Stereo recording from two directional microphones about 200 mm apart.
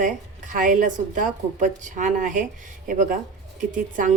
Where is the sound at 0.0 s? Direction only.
40° right (ahead or behind).